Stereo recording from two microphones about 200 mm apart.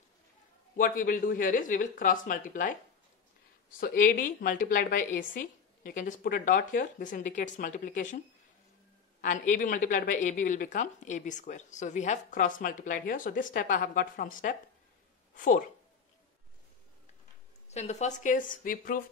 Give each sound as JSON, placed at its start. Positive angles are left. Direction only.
{"t": 0.7, "sound": "a woman's voice", "side_deg": 45}
{"t": 3.8, "sound": "a woman's voice", "side_deg": 45}
{"t": 9.2, "sound": "a woman's voice", "side_deg": 40}
{"t": 17.7, "sound": "a woman's voice", "side_deg": 35}